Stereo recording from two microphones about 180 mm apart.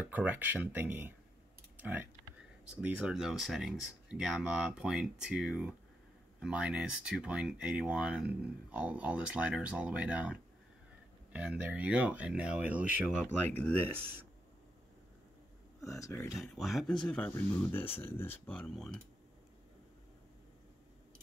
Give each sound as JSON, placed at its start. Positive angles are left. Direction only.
{"t": 0.1, "sound": "speech", "side_deg": -10}
{"t": 15.8, "sound": "speech", "side_deg": 15}
{"t": 16.3, "sound": "speech", "side_deg": 0}